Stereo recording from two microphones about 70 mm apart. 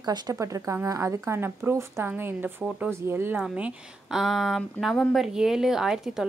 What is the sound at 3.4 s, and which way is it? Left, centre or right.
Speech, centre.